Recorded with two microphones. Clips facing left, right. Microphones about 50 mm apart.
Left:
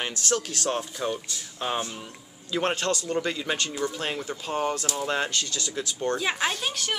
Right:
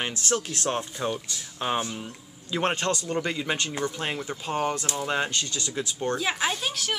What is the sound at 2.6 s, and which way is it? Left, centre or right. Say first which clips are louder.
Speech: right 1 dB; right.